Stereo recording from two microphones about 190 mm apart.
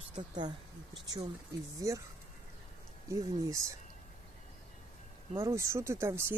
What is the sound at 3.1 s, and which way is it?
Speech, 15° right (ahead or behind).